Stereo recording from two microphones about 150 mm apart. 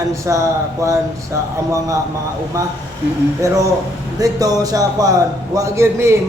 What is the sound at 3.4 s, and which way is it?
Speech, 20° right (ahead or behind).